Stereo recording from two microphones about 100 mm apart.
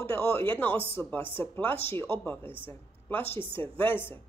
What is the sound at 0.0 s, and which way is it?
Speech, 25° left (ahead or behind).